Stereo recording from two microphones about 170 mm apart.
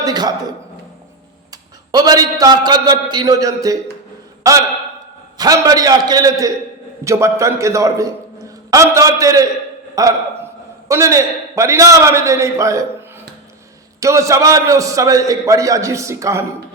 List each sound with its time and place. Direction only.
0.0 s a man's voice: 25° right (ahead or behind)
1.9 s a man's voice: 20° right (ahead or behind)
14.0 s a man's voice: 20° right (ahead or behind)